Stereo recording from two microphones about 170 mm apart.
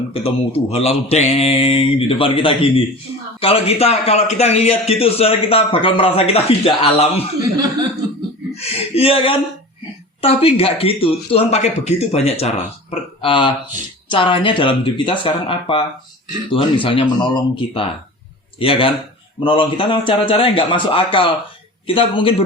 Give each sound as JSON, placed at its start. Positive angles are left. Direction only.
{"t": 0.1, "sound": "a man's voice", "side_deg": 35}
{"t": 7.5, "sound": "chuckle", "side_deg": -20}
{"t": 8.5, "sound": "a sound", "side_deg": 35}
{"t": 10.2, "sound": "a man's voice", "side_deg": 35}